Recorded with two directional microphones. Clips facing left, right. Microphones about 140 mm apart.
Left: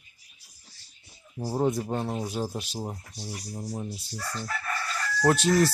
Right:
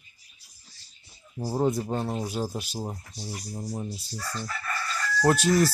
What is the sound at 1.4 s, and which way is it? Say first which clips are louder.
Speech: right 1 dB; 5° right (ahead or behind).